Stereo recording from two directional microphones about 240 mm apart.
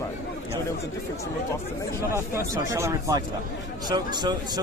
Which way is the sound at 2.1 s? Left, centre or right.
Centre.